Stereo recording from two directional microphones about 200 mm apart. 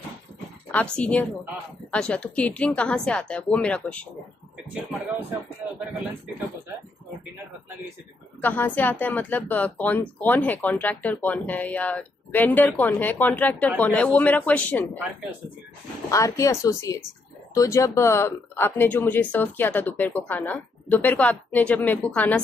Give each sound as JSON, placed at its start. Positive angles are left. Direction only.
{"t": 0.7, "sound": "a woman's voice", "side_deg": 5}
{"t": 8.4, "sound": "speech", "side_deg": 10}
{"t": 16.1, "sound": "speech", "side_deg": 15}